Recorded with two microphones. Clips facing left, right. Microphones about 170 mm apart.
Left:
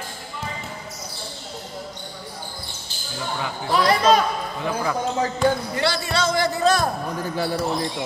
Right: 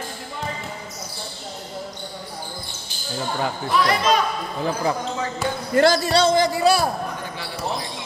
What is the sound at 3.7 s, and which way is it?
Speech, 35° left (ahead or behind).